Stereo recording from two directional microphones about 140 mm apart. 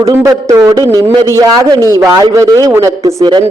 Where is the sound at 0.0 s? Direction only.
20° right (ahead or behind).